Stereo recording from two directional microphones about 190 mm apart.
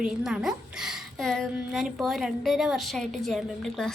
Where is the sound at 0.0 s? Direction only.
Centre (ahead or behind).